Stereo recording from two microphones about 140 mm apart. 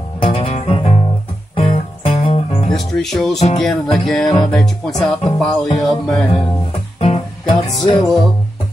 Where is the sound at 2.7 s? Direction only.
Centre (ahead or behind).